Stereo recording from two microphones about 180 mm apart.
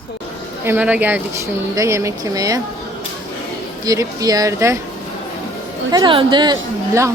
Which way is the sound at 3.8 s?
20° right (ahead or behind).